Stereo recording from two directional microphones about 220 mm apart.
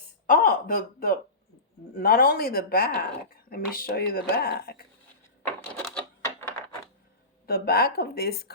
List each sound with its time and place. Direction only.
0.3 s speech: 40° left (ahead or behind)
5.5 s a sound: 5° left (ahead or behind)
7.4 s speech: 45° left (ahead or behind)